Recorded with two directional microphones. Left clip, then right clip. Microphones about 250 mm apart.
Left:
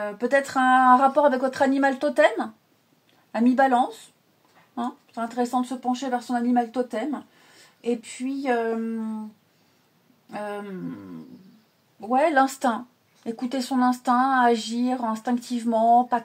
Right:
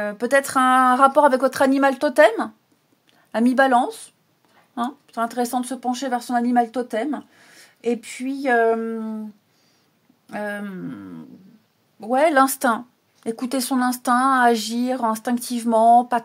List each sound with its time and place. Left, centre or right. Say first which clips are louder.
0.0 s speech: right 3 dB; right
10.3 s speech: right 4 dB; right
12.1 s speech: right 3 dB; right